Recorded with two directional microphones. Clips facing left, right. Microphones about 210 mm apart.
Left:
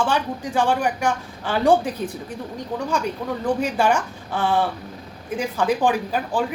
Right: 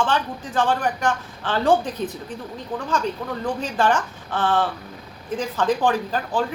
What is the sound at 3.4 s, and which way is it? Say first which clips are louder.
A woman's voice: left 2 dB; 10° left (ahead or behind).